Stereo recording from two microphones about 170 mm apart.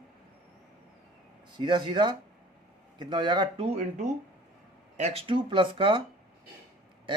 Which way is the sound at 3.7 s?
45° right (ahead or behind).